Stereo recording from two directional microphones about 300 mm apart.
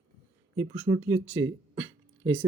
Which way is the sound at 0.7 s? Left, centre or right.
Centre.